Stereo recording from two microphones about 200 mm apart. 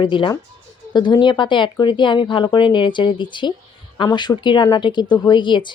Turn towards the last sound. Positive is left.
turn(degrees=25)  # may be behind; listen again after turning